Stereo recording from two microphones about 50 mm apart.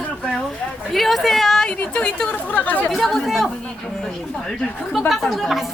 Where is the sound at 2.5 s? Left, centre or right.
Left.